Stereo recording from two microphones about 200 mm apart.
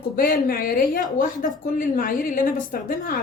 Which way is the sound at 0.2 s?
45° left (ahead or behind).